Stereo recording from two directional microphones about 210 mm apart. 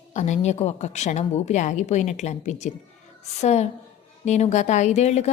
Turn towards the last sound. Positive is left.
turn(degrees=30)  # may be behind; listen again after turning